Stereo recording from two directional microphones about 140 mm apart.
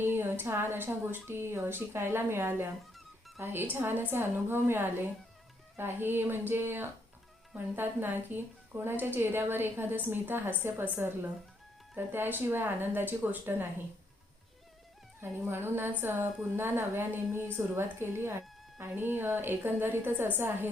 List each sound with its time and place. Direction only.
0.0 s a woman's voice: 15° right (ahead or behind)
15.2 s a woman's voice: 15° right (ahead or behind)